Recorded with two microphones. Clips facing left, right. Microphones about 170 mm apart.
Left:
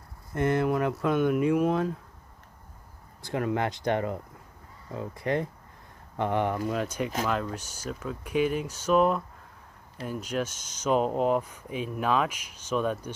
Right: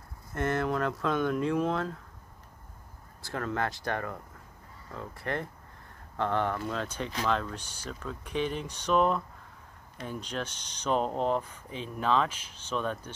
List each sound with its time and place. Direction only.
0.3 s speech: 15° left (ahead or behind)
3.2 s speech: 15° left (ahead or behind)